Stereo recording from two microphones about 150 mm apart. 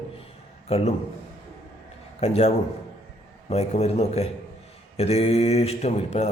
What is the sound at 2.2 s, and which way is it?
A man's voice, 45° left (ahead or behind).